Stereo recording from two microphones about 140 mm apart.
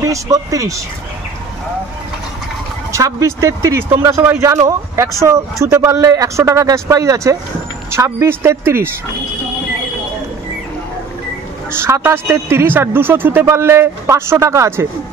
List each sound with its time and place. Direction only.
0.0 s speech: 25° right (ahead or behind)
2.9 s speech: 20° right (ahead or behind)
11.7 s speech: 15° right (ahead or behind)